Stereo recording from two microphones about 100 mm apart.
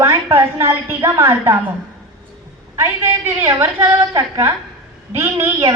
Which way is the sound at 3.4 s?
20° right (ahead or behind).